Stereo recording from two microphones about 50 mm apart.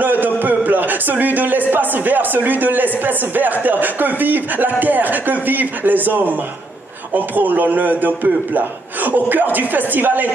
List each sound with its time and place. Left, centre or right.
0.0 s a man's voice: right